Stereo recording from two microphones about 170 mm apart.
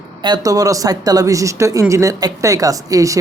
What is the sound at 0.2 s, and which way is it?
Speech, 25° right (ahead or behind).